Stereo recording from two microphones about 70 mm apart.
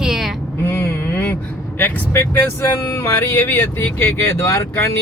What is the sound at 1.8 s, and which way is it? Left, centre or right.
Speech, left.